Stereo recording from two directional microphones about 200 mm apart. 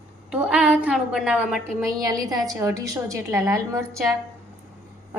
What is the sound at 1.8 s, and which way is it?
A woman's voice, 20° right (ahead or behind).